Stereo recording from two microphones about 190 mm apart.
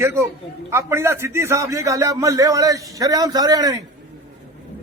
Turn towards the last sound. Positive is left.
turn(degrees=-20)  # may be behind; listen again after turning